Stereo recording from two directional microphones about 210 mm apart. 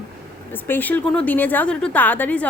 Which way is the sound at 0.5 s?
10° left (ahead or behind).